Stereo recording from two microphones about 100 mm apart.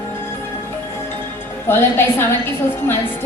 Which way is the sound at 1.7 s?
25° left (ahead or behind).